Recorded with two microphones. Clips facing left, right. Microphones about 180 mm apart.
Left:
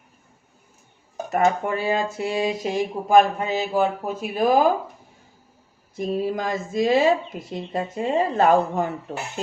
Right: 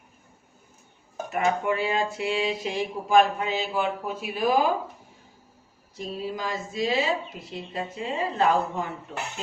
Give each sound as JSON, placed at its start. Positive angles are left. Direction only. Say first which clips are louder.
{"t": 1.3, "sound": "speech", "louder": "left 4 dB", "side_deg": 40}
{"t": 6.0, "sound": "speech", "louder": "left 7 dB", "side_deg": 50}